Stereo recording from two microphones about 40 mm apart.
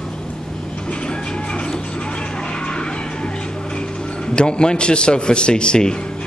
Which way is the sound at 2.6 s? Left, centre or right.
Left.